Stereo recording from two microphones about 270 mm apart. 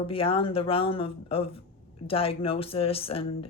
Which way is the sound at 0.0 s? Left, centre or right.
Centre.